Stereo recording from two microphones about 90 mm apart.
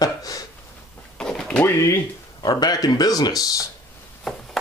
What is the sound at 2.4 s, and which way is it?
Speech, 50° left (ahead or behind).